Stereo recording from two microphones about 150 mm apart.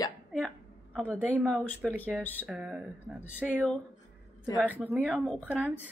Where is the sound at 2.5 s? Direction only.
5° right (ahead or behind).